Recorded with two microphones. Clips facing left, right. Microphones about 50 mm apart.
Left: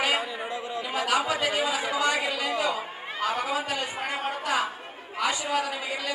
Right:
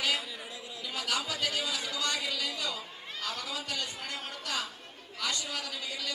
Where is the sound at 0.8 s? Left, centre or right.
Left.